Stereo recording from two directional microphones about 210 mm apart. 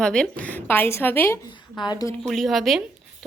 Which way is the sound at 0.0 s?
5° left (ahead or behind).